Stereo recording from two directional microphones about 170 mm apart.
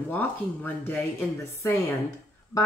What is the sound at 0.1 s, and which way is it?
Speech, 10° left (ahead or behind).